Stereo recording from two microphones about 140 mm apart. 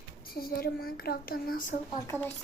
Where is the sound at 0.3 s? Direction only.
90° left.